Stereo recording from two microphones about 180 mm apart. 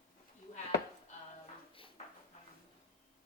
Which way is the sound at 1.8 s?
30° left (ahead or behind).